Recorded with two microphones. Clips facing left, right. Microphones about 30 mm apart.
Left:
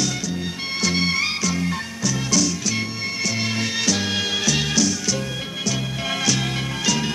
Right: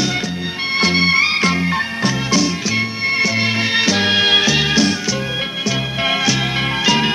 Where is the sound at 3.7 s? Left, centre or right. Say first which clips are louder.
Right 9 dB; right.